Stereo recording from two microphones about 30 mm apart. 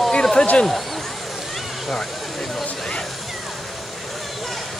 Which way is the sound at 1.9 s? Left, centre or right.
Centre.